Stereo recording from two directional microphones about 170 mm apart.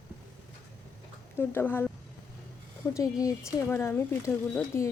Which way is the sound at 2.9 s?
20° left (ahead or behind).